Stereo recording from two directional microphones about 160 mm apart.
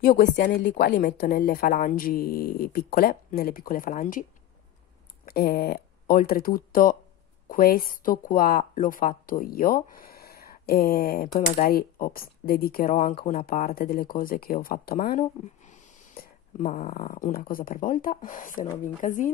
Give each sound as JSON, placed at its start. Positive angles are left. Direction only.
{"t": 0.0, "sound": "speech", "side_deg": 60}
{"t": 0.9, "sound": "speech", "side_deg": 60}
{"t": 5.2, "sound": "speech", "side_deg": 70}
{"t": 16.2, "sound": "a sound", "side_deg": 50}
{"t": 16.9, "sound": "speech", "side_deg": 60}